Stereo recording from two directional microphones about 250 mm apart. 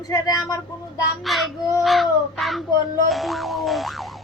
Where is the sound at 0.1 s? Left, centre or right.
Centre.